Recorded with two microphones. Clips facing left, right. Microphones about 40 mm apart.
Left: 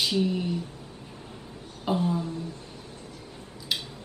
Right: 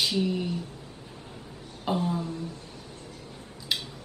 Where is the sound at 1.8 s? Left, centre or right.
Centre.